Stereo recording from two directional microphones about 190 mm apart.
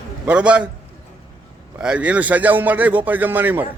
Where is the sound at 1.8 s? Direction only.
5° right (ahead or behind).